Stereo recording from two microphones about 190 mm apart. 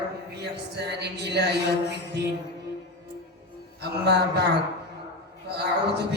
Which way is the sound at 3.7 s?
60° right (ahead or behind).